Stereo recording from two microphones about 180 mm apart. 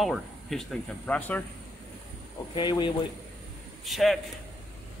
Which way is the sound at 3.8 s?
Centre (ahead or behind).